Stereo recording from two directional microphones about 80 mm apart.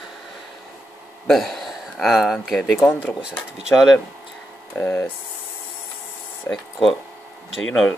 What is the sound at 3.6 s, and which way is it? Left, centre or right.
Speech, centre.